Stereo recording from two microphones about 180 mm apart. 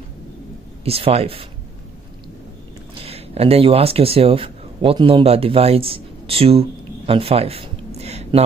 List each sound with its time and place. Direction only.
0.8 s speech: 35° right (ahead or behind)
2.9 s speech: 30° right (ahead or behind)
7.1 s a sound: 30° right (ahead or behind)